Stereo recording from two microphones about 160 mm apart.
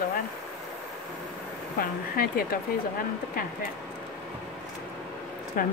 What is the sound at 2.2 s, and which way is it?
Speech, 65° left (ahead or behind).